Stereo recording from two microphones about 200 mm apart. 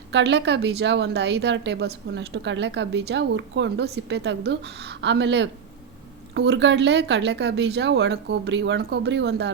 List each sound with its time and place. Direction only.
0.1 s a woman's voice: 60° right (ahead or behind)